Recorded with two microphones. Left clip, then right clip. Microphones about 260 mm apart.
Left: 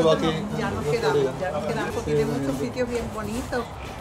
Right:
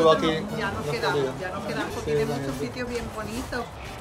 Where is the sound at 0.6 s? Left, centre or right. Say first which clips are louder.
Left 3 dB; centre.